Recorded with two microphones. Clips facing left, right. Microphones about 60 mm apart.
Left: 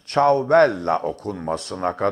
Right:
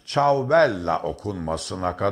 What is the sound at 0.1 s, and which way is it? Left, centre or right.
Speech, left.